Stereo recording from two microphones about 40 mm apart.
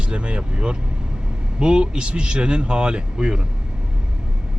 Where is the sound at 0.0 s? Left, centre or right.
Right.